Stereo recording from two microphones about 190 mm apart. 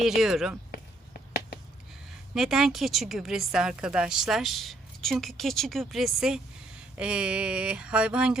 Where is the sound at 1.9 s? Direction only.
Centre (ahead or behind).